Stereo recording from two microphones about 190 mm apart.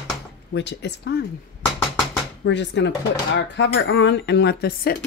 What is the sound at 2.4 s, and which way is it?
Speech, 70° left (ahead or behind).